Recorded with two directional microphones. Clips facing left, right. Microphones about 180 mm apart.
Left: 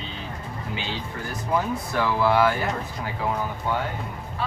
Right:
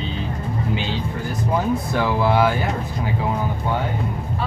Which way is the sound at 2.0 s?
20° right (ahead or behind).